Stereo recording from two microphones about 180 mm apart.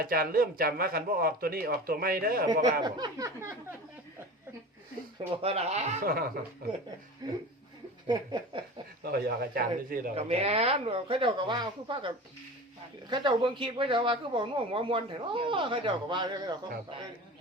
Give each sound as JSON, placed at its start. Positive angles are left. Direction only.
{"t": 0.0, "sound": "speech", "side_deg": -55}
{"t": 2.5, "sound": "speech", "side_deg": -25}
{"t": 5.4, "sound": "speech", "side_deg": -35}
{"t": 6.6, "sound": "speech", "side_deg": -60}
{"t": 7.2, "sound": "speech", "side_deg": -20}
{"t": 9.0, "sound": "speech", "side_deg": -55}
{"t": 10.2, "sound": "speech", "side_deg": -35}